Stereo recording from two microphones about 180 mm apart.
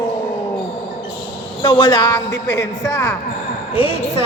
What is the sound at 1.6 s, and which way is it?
Speech, 25° left (ahead or behind).